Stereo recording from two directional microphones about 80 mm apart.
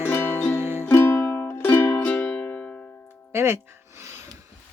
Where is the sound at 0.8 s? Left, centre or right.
Left.